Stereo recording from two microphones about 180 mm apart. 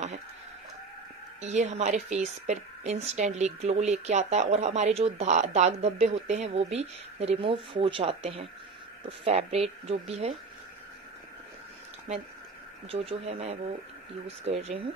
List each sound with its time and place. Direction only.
1.4 s a woman's voice: 40° right (ahead or behind)
12.8 s a woman's voice: 30° right (ahead or behind)